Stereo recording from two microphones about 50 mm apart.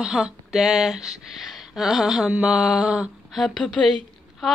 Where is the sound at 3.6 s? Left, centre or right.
Centre.